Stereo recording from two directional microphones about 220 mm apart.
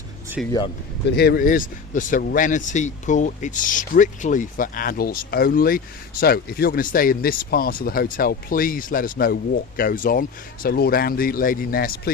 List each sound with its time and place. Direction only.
0.4 s speech: centre (ahead or behind)
1.0 s speech: 50° left (ahead or behind)